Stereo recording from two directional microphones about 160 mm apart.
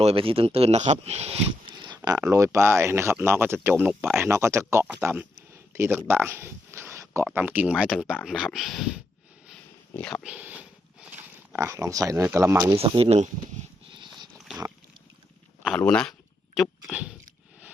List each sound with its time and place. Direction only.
0.0 s speech: 35° right (ahead or behind)
2.1 s speech: 15° right (ahead or behind)
4.3 s speech: 20° right (ahead or behind)
6.1 s a sound: 15° right (ahead or behind)
7.3 s speech: 10° right (ahead or behind); by 10.2 s 10° left (ahead or behind)
10.2 s speech: 10° right (ahead or behind)
12.7 s speech: 35° right (ahead or behind)
14.3 s dog: 5° right (ahead or behind)
15.6 s speech: 5° left (ahead or behind)